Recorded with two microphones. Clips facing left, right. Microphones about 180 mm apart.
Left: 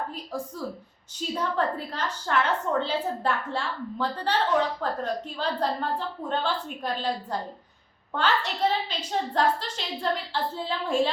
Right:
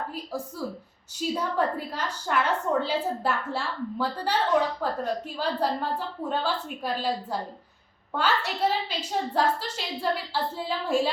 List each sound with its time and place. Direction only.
0.1 s a woman's voice: 5° right (ahead or behind)